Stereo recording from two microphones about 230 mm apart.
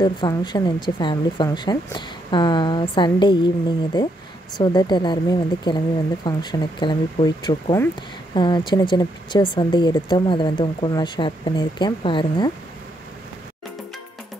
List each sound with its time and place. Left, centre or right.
0.0 s a woman's voice: centre